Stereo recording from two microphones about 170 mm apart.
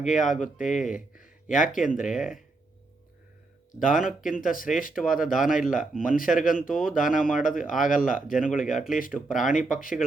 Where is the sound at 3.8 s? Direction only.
50° left (ahead or behind).